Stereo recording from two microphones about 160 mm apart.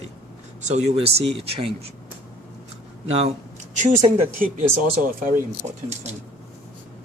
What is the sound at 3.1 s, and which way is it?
Speech, 40° right (ahead or behind).